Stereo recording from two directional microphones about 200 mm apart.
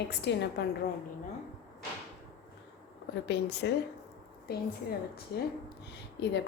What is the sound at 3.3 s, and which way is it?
A woman's voice, 60° left (ahead or behind).